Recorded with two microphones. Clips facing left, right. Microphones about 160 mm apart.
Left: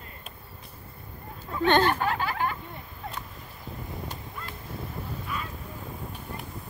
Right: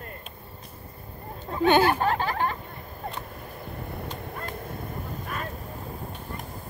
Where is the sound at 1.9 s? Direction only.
35° right (ahead or behind).